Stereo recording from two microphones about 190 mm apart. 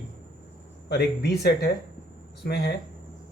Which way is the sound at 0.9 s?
60° left (ahead or behind).